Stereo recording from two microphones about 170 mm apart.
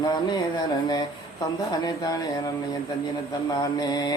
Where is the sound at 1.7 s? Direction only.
20° left (ahead or behind).